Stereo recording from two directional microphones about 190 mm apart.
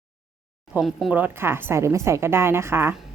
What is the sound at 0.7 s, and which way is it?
Speech, 5° right (ahead or behind).